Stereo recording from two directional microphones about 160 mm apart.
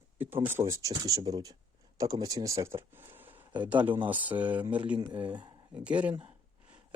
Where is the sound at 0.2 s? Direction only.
15° right (ahead or behind).